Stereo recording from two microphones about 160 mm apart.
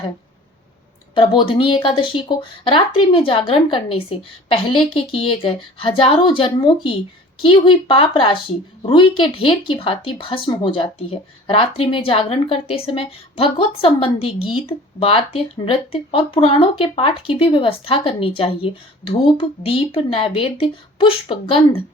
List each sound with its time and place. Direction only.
1.1 s speech: 30° left (ahead or behind)